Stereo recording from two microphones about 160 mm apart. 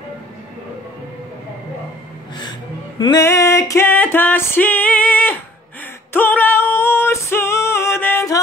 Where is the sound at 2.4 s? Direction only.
25° left (ahead or behind).